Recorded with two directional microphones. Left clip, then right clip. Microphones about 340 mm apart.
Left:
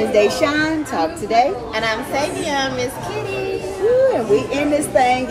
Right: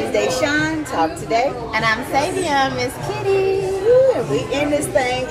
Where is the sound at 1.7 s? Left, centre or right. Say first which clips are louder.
Right 2 dB; centre.